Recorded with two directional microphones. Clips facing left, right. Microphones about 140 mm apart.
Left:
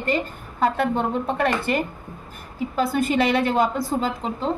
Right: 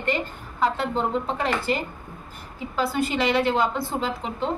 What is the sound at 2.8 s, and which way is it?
A woman's voice, 50° left (ahead or behind).